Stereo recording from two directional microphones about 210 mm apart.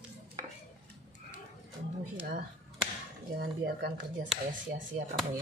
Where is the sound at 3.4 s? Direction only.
50° right (ahead or behind).